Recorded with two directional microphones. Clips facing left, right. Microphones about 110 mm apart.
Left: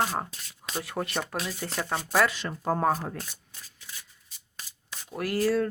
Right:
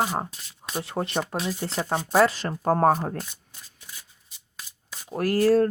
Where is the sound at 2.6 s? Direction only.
45° right (ahead or behind).